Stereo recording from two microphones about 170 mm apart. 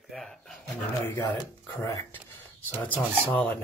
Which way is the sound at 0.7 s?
15° left (ahead or behind).